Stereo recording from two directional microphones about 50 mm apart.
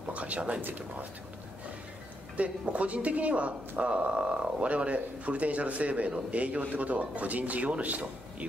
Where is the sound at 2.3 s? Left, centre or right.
Right.